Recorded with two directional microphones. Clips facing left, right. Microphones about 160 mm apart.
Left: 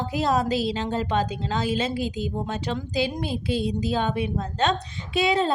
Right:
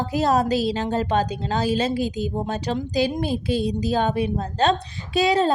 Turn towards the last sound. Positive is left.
turn(degrees=-40)  # may be behind; listen again after turning